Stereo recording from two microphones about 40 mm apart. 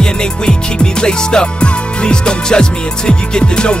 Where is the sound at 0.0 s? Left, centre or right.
Left.